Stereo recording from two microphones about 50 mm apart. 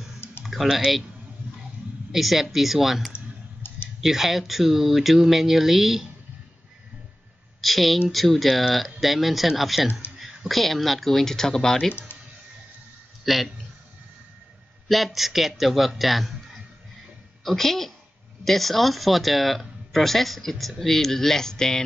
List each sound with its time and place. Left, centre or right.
0.2 s typing: left
0.7 s speech: centre
2.1 s speech: centre
3.6 s a sound: left
4.0 s speech: centre
7.6 s speech: centre
12.1 s a sound: left
13.2 s a man's voice: centre
14.9 s speech: centre
16.0 s music: centre
17.4 s a woman's voice: centre